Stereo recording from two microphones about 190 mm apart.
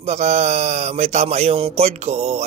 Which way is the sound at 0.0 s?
35° right (ahead or behind).